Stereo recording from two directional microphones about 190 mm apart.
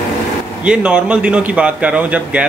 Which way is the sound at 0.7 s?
5° right (ahead or behind).